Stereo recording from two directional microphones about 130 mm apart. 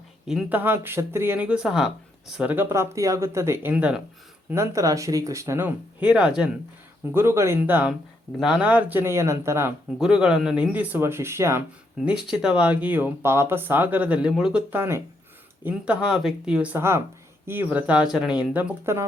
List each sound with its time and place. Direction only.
0.5 s speech: 15° right (ahead or behind)
4.4 s speech: 20° right (ahead or behind)
7.0 s speech: 20° right (ahead or behind)
10.0 s speech: 5° right (ahead or behind)
12.0 s speech: 5° right (ahead or behind)
15.6 s speech: 10° right (ahead or behind)